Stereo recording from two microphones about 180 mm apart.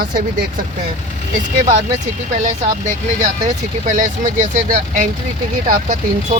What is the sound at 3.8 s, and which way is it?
Speech, 45° right (ahead or behind).